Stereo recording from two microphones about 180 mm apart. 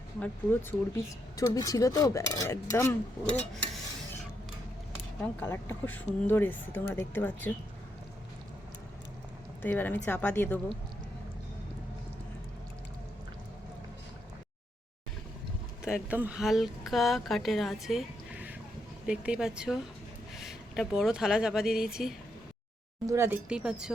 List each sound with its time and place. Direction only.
1.4 s cutlery: 20° left (ahead or behind)
5.2 s speech: 10° left (ahead or behind)
9.6 s speech: 10° left (ahead or behind)
15.8 s speech: 5° right (ahead or behind)
23.0 s speech: 15° right (ahead or behind)